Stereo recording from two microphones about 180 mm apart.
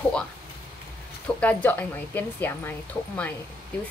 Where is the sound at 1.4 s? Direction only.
10° left (ahead or behind).